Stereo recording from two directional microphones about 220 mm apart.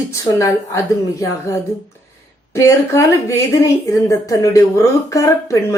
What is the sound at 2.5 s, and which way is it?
Speech, 15° left (ahead or behind).